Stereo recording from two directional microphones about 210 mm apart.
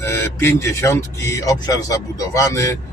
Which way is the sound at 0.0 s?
10° left (ahead or behind).